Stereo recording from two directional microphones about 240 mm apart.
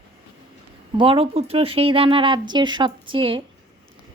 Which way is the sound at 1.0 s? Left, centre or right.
Right.